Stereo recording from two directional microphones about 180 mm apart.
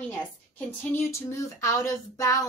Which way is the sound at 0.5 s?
15° left (ahead or behind).